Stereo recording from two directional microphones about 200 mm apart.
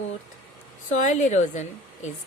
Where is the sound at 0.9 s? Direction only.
35° left (ahead or behind).